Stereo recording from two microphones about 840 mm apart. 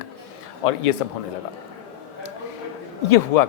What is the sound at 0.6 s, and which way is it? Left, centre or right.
Speech, left.